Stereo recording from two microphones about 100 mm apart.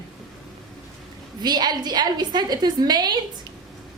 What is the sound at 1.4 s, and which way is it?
A woman's voice, 45° right (ahead or behind).